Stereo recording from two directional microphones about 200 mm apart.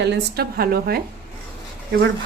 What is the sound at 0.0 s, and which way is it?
A woman's voice, 55° right (ahead or behind).